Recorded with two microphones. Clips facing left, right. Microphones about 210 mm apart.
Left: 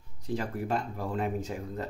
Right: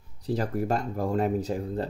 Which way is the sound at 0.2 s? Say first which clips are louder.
Right 5 dB; 40° right (ahead or behind).